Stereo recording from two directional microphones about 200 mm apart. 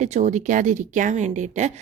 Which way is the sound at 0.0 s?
35° right (ahead or behind).